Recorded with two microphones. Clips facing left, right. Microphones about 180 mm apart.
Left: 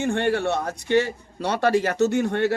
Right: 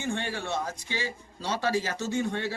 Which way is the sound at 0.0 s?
65° left (ahead or behind).